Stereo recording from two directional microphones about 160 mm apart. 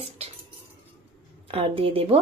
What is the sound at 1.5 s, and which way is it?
Speech, 35° right (ahead or behind).